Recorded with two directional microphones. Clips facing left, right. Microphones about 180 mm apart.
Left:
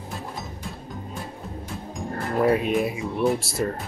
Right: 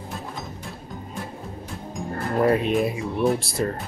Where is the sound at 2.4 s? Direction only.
Centre (ahead or behind).